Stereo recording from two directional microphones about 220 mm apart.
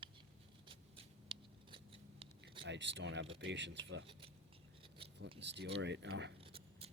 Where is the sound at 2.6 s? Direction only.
55° right (ahead or behind).